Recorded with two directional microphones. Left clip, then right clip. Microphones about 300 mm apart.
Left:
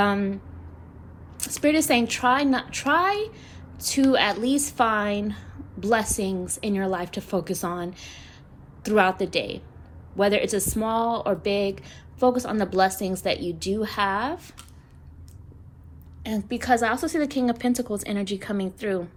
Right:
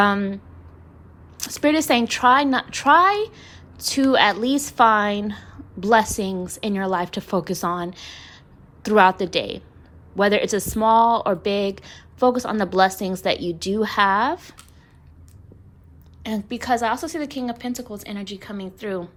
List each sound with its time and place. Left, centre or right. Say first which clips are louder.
0.0 s a woman's voice: right 4 dB; centre
1.4 s a woman's voice: right 2 dB; centre
16.2 s a woman's voice: right 1 dB; centre